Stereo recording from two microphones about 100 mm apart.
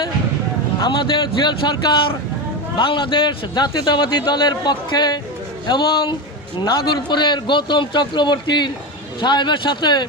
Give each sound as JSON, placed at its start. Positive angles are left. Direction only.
{"t": 0.8, "sound": "a man's voice", "side_deg": 50}